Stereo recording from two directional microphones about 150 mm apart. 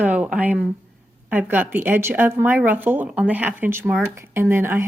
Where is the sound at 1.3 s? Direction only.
10° right (ahead or behind).